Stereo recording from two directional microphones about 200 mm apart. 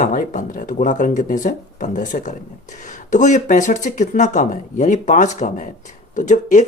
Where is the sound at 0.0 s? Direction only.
40° left (ahead or behind).